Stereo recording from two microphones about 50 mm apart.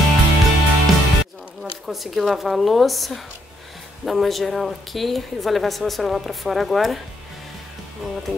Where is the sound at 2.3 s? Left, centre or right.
Centre.